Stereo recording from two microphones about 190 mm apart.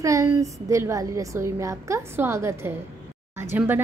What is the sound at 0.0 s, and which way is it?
Speech, 15° right (ahead or behind).